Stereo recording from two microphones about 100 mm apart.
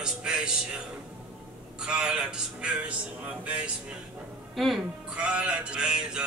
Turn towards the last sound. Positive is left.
turn(degrees=-5)  # may be behind; listen again after turning